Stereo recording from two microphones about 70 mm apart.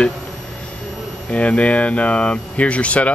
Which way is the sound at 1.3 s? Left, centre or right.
Centre.